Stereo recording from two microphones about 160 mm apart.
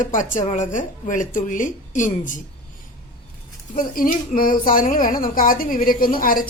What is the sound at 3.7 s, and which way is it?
A woman's voice, 55° left (ahead or behind).